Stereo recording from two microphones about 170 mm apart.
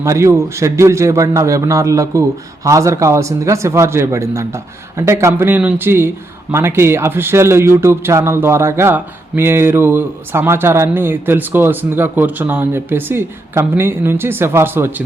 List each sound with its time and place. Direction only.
0.0 s speech: 15° right (ahead or behind)